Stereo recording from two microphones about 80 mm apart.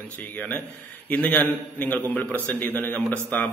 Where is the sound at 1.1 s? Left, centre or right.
Centre.